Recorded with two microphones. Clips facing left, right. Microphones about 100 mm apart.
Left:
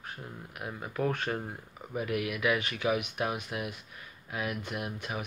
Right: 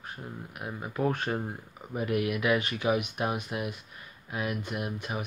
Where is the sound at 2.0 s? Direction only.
35° right (ahead or behind).